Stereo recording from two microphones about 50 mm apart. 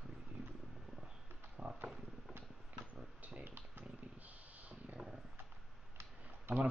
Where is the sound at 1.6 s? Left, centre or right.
Right.